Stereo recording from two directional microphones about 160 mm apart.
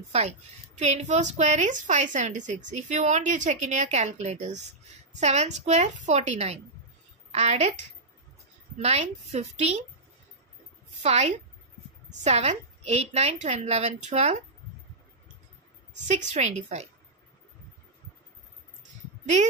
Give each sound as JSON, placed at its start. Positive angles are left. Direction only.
{"t": 0.7, "sound": "a woman's voice", "side_deg": -45}
{"t": 11.0, "sound": "a woman's voice", "side_deg": -45}
{"t": 16.1, "sound": "a woman's voice", "side_deg": -45}